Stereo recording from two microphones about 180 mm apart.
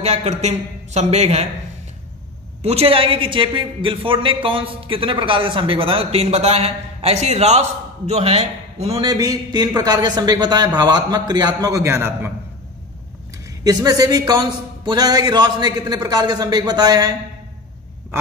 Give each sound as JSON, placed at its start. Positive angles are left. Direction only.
{"t": 0.0, "sound": "a man's voice", "side_deg": -35}
{"t": 2.6, "sound": "a woman's voice", "side_deg": -35}
{"t": 9.0, "sound": "a woman's voice", "side_deg": -20}
{"t": 13.7, "sound": "a woman's voice", "side_deg": -20}